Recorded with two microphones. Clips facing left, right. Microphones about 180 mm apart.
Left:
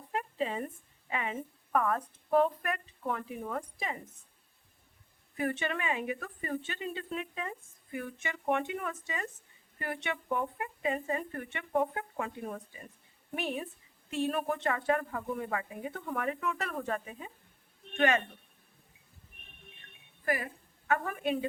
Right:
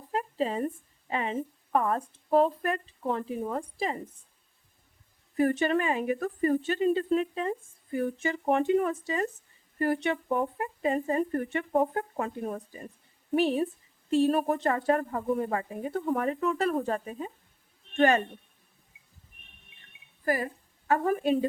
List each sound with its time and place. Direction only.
0.1 s a sound: 35° right (ahead or behind)
1.1 s speech: 30° right (ahead or behind)
5.4 s a woman's voice: 40° right (ahead or behind)
20.2 s a woman's voice: 35° right (ahead or behind)